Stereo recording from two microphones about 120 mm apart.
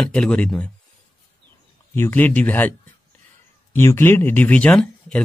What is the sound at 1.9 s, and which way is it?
Speech, 20° left (ahead or behind).